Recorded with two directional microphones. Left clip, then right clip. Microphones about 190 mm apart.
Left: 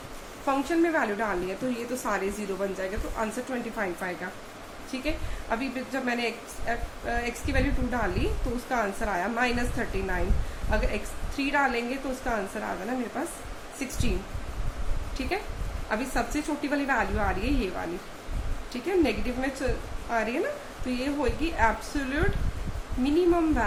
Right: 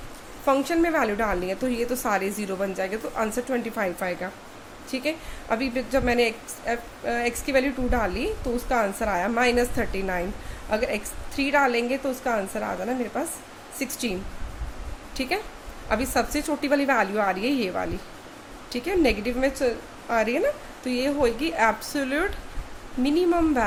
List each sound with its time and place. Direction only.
0.4 s a woman's voice: 45° right (ahead or behind)
15.2 s a woman's voice: 50° right (ahead or behind)